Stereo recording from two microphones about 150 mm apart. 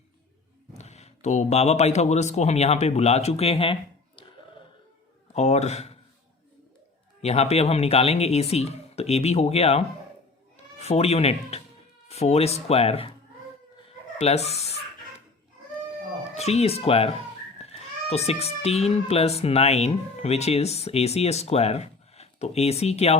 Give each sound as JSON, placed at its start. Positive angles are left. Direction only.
{"t": 0.7, "sound": "speech", "side_deg": 45}
{"t": 5.3, "sound": "speech", "side_deg": 50}
{"t": 7.2, "sound": "speech", "side_deg": 45}
{"t": 13.8, "sound": "chicken", "side_deg": 45}
{"t": 16.3, "sound": "speech", "side_deg": 45}